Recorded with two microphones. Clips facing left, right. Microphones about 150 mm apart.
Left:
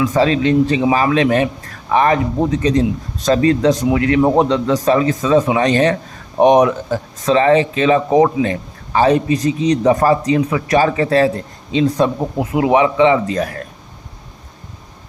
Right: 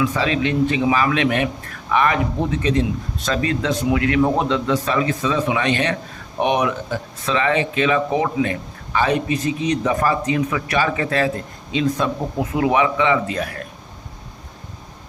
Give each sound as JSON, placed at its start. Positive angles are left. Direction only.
{"t": 0.0, "sound": "speech", "side_deg": 40}
{"t": 13.3, "sound": "speech", "side_deg": 40}